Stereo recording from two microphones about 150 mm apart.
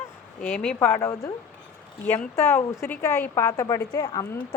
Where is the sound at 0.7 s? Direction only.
20° left (ahead or behind).